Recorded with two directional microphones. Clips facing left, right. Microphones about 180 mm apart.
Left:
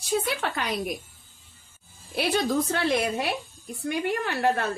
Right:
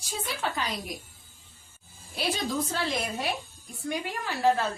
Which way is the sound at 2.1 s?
65° left (ahead or behind).